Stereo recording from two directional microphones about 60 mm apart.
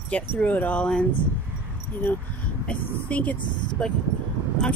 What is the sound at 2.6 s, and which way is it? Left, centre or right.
Speech, left.